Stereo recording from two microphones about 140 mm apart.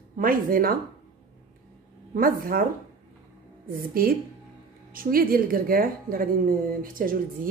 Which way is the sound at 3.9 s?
90° right.